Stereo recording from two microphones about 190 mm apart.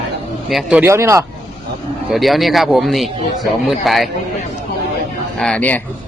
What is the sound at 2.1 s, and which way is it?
A man's voice, centre (ahead or behind).